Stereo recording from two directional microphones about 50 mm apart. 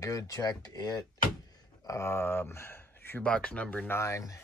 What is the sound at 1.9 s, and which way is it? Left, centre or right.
Speech, left.